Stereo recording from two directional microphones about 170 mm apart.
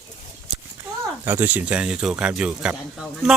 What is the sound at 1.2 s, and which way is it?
Speech, 10° right (ahead or behind).